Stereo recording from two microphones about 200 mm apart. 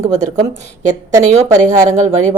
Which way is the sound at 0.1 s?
35° right (ahead or behind).